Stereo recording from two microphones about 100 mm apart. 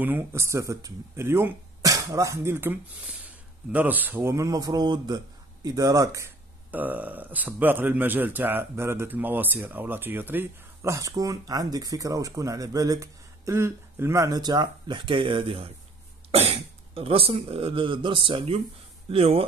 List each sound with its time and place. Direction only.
0.0 s speech: 15° right (ahead or behind)
0.4 s speech: 30° right (ahead or behind)
4.3 s speech: 35° right (ahead or behind)
6.7 s speech: 15° right (ahead or behind); by 15.7 s 65° right (ahead or behind)
16.3 s speech: 75° right (ahead or behind)